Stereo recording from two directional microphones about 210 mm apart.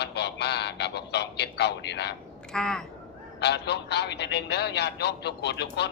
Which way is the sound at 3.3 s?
55° left (ahead or behind).